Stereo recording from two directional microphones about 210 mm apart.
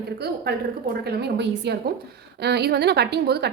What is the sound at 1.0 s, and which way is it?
A woman's voice, 50° right (ahead or behind).